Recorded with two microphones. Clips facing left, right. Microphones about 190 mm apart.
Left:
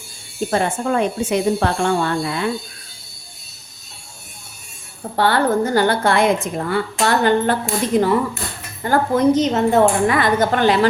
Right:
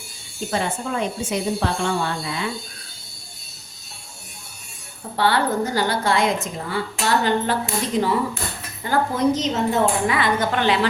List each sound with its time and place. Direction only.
0.3 s a woman's voice: 55° left (ahead or behind)
5.1 s a woman's voice: 50° left (ahead or behind)